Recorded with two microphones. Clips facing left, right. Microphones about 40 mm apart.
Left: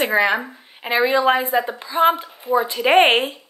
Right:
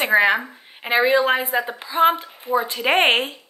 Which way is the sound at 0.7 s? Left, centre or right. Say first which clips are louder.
Right 1 dB; centre.